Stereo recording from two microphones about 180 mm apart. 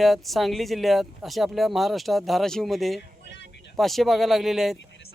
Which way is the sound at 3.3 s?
75° left (ahead or behind).